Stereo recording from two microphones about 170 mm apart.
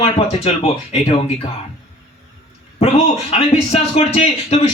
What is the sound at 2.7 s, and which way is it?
A man's voice, 40° left (ahead or behind).